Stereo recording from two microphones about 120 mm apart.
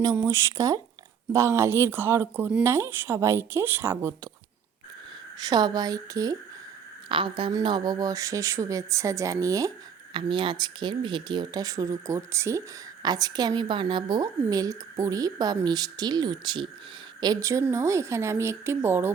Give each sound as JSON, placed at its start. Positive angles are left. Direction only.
{"t": 0.3, "sound": "a woman's voice", "side_deg": -25}
{"t": 5.4, "sound": "speech", "side_deg": -35}
{"t": 7.1, "sound": "a woman's voice", "side_deg": -45}
{"t": 10.1, "sound": "a woman's voice", "side_deg": -45}